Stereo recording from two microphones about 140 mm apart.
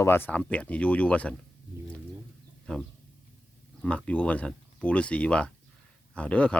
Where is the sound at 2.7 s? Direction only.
10° left (ahead or behind).